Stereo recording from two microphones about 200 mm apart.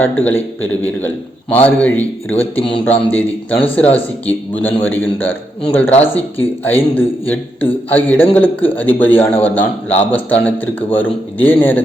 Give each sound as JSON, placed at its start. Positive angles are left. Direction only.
{"t": 0.0, "sound": "speech", "side_deg": 10}
{"t": 2.6, "sound": "speech", "side_deg": 25}
{"t": 2.8, "sound": "speech", "side_deg": 10}